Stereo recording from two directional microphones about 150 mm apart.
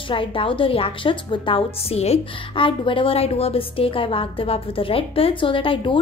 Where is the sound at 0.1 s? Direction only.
35° left (ahead or behind).